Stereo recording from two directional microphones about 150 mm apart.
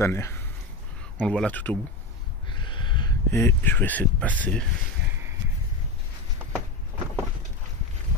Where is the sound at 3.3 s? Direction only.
15° left (ahead or behind).